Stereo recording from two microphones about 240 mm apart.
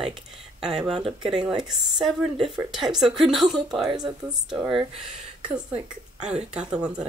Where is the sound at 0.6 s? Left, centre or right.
Centre.